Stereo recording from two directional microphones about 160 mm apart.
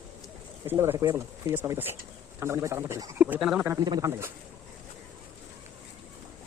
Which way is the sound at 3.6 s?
20° right (ahead or behind).